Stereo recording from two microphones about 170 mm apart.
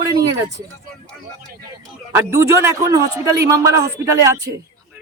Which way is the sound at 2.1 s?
15° right (ahead or behind).